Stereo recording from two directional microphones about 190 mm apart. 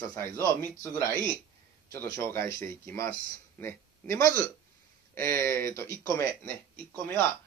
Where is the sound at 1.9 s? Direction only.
15° left (ahead or behind).